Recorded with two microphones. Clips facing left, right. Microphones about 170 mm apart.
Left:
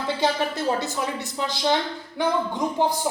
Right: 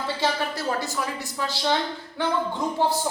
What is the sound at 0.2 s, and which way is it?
Speech, 20° left (ahead or behind).